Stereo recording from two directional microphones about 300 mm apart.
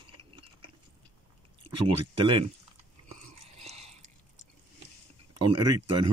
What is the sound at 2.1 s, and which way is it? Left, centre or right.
Speech, centre.